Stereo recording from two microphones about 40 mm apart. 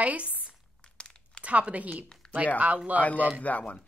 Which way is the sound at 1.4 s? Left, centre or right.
Right.